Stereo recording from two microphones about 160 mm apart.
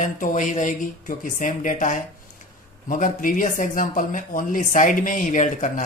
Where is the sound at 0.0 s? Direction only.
55° left (ahead or behind).